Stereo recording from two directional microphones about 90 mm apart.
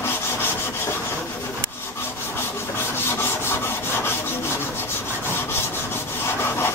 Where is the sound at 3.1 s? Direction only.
25° left (ahead or behind).